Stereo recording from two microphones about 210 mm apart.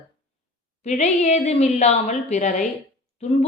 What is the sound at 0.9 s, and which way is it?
A woman's voice, 30° left (ahead or behind).